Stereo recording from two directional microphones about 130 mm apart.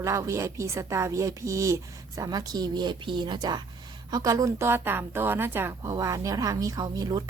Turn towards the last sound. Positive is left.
turn(degrees=-30)  # may be behind; listen again after turning